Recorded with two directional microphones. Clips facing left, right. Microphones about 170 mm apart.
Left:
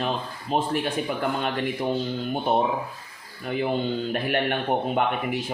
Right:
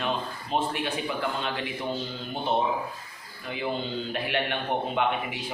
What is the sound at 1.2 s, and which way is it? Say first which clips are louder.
Speech: left 4 dB; 50° left (ahead or behind).